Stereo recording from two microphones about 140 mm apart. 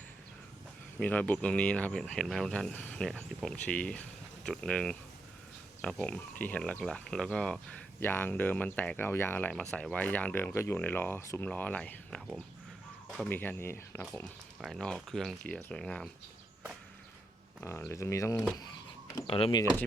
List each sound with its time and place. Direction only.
0.9 s speech: 10° left (ahead or behind)
17.6 s speech: 15° left (ahead or behind)
18.5 s a sound: 25° left (ahead or behind)
19.3 s speech: 35° left (ahead or behind)